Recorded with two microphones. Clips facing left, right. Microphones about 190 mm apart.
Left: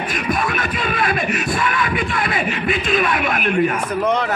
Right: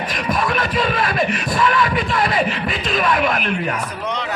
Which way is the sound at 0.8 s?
40° right (ahead or behind).